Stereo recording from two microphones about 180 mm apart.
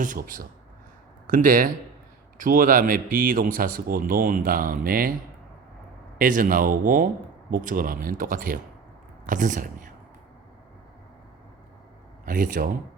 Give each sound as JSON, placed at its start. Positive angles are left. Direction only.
{"t": 0.0, "sound": "speech", "side_deg": -50}
{"t": 6.1, "sound": "speech", "side_deg": -50}
{"t": 12.2, "sound": "speech", "side_deg": -50}